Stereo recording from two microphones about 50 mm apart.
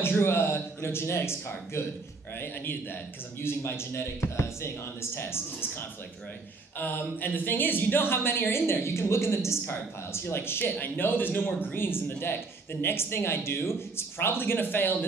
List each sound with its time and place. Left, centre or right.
0.0 s a man's voice: left
3.3 s a man's voice: left
6.8 s speech: left
10.8 s a man's voice: left